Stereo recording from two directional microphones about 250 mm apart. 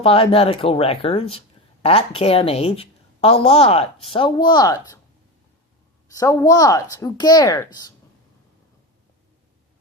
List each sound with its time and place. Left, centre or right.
0.0 s speech: left
6.1 s speech: centre